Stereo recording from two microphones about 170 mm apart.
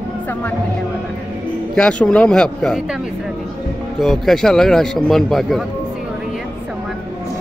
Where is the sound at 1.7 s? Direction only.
5° left (ahead or behind).